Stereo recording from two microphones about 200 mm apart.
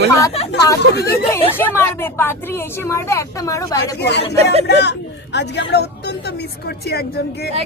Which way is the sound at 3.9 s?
55° left (ahead or behind).